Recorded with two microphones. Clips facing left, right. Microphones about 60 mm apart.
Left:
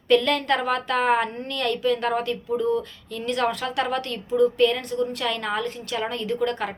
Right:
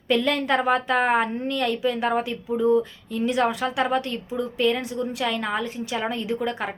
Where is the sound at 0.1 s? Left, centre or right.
Centre.